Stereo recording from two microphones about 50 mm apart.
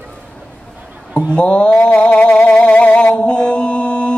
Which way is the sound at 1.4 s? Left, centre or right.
Left.